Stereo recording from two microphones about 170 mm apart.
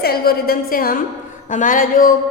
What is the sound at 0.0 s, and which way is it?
Speech, 65° left (ahead or behind).